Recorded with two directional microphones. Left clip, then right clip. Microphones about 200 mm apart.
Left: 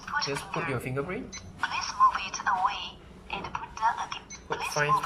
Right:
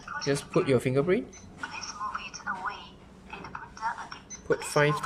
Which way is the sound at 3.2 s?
20° left (ahead or behind).